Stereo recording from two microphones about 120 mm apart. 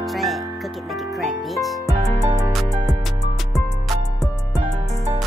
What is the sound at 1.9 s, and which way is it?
Music, 25° right (ahead or behind).